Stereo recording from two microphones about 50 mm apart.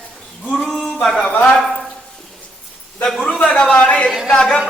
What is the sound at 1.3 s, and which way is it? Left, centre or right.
Speech, left.